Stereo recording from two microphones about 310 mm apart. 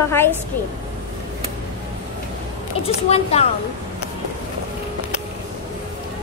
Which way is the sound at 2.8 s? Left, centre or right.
Centre.